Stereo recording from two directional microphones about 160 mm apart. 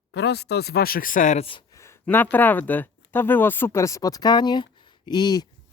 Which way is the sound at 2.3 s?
10° left (ahead or behind).